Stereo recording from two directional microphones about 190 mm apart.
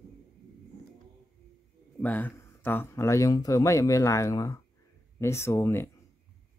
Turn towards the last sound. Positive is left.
turn(degrees=15)  # may be behind; listen again after turning